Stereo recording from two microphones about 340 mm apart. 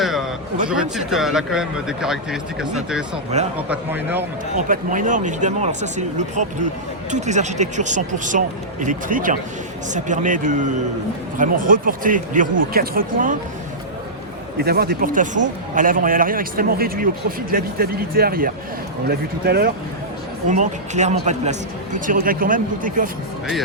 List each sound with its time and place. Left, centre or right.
0.0 s a sound: centre
0.7 s speech: centre
3.3 s a man's voice: centre
3.7 s speech: centre
4.5 s a man's voice: right
14.6 s a man's voice: right